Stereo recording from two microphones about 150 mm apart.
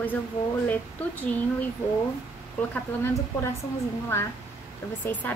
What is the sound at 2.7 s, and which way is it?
Speech, 15° left (ahead or behind).